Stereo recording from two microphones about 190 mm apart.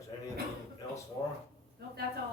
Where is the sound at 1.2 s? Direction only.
15° left (ahead or behind).